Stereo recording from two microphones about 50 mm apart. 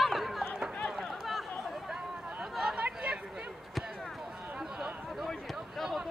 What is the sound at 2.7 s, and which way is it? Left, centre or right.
Chatter, right.